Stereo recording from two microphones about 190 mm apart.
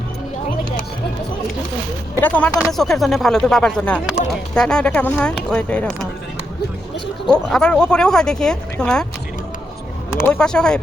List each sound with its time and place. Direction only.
2.2 s speech: 10° left (ahead or behind)
7.3 s speech: 5° left (ahead or behind)
10.2 s speech: 5° left (ahead or behind)